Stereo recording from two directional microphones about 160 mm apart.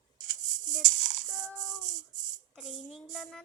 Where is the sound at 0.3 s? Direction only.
55° right (ahead or behind).